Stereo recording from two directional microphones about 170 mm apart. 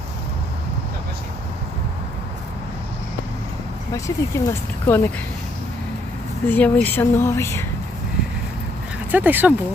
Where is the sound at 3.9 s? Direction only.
15° left (ahead or behind).